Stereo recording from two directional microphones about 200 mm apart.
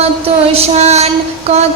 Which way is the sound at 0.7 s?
35° right (ahead or behind).